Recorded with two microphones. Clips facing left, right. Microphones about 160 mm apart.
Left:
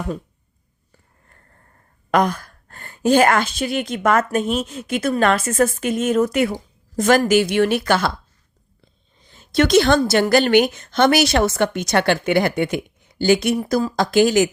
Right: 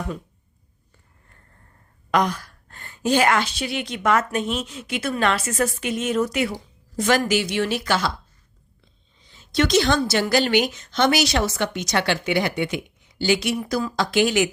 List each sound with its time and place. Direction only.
2.0 s a woman's voice: 50° left (ahead or behind)
9.1 s a woman's voice: 50° left (ahead or behind)